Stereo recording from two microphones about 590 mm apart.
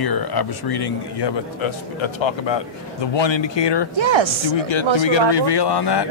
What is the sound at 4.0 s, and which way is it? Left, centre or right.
Speech, right.